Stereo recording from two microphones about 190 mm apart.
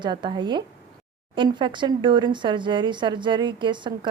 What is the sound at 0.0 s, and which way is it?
Speech, 25° right (ahead or behind).